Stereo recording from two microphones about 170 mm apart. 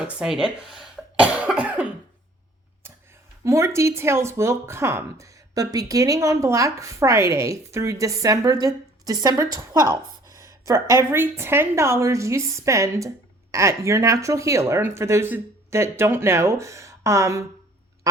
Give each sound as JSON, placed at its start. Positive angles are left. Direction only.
{"t": 0.2, "sound": "cough", "side_deg": -5}
{"t": 2.8, "sound": "a sound", "side_deg": -15}
{"t": 3.4, "sound": "speech", "side_deg": -15}
{"t": 18.0, "sound": "quack", "side_deg": -20}